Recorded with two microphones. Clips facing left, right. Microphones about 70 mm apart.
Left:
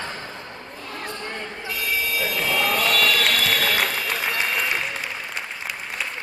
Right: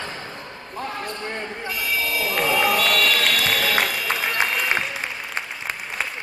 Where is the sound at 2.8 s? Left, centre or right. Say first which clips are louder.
Even; centre.